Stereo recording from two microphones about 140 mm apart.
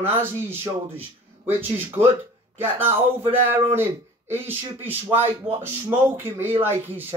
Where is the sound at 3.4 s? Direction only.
15° right (ahead or behind).